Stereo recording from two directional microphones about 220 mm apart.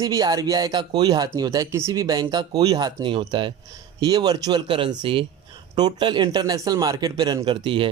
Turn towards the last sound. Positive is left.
turn(degrees=-20)  # may be behind; listen again after turning